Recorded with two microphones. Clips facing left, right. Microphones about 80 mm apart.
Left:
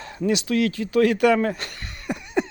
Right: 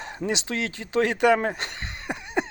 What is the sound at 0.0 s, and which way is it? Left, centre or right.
Speech, right.